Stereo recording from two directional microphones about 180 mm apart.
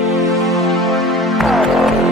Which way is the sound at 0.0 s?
Centre (ahead or behind).